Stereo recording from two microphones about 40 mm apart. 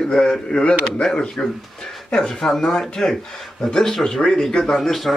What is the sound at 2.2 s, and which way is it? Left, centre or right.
Speech, centre.